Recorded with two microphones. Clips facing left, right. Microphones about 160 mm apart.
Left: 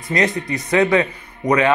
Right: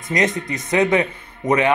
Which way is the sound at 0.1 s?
20° right (ahead or behind).